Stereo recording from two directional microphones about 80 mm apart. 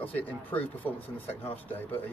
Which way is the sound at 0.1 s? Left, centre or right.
Left.